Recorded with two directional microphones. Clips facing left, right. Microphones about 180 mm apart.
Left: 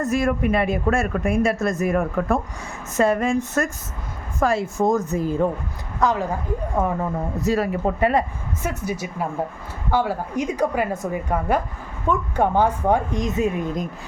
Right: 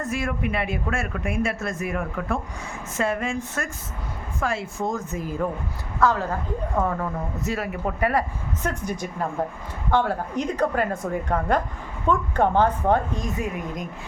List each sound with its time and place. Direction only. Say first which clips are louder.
0.0 s speech: left 6 dB; 40° left (ahead or behind)
6.0 s a woman's voice: left 1 dB; 15° left (ahead or behind)
7.4 s speech: left 7 dB; 35° left (ahead or behind)
8.6 s a woman's voice: left 2 dB; 5° left (ahead or behind); by 13.8 s 25° left (ahead or behind)